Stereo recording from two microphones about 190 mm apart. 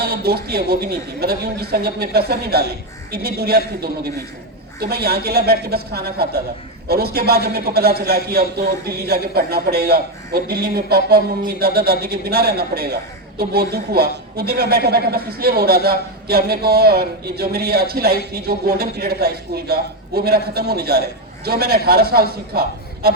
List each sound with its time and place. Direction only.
0.0 s a man's voice: 55° right (ahead or behind)
4.8 s a man's voice: 55° right (ahead or behind)